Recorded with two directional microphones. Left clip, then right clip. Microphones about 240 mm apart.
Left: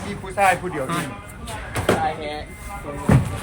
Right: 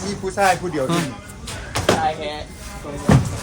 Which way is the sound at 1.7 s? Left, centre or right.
Centre.